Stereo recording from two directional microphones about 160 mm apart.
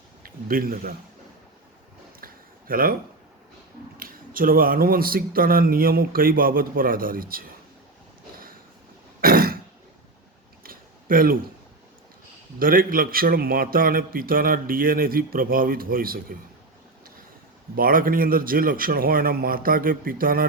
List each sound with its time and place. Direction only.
0.2 s speech: 65° right (ahead or behind)
2.2 s a sound: 60° right (ahead or behind)
3.9 s a man's voice: 65° right (ahead or behind)
9.2 s throat clearing: 65° right (ahead or behind)
10.6 s a sound: 65° right (ahead or behind)
12.5 s a man's voice: 65° right (ahead or behind)
17.7 s a man's voice: 60° right (ahead or behind)